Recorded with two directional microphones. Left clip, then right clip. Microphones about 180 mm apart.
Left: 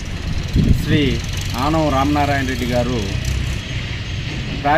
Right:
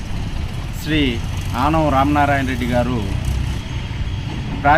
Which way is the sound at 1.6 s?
5° right (ahead or behind).